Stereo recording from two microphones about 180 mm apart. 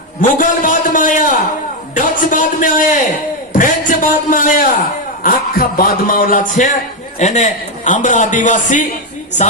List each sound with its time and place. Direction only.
0.2 s a man's voice: 45° left (ahead or behind)